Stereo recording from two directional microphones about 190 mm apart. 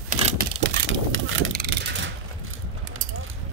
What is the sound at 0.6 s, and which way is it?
Vehicle, 90° right.